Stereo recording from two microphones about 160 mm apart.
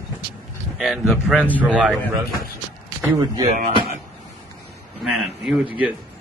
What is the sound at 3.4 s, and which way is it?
Speech, 45° right (ahead or behind).